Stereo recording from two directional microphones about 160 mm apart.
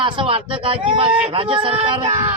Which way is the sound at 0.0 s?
35° right (ahead or behind).